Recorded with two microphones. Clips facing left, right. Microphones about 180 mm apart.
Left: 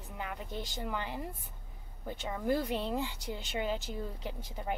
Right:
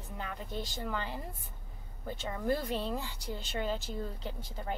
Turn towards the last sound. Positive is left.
turn(degrees=15)  # may be behind; listen again after turning